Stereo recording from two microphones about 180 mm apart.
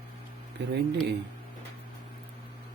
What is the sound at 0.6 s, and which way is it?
Speech, 75° right (ahead or behind).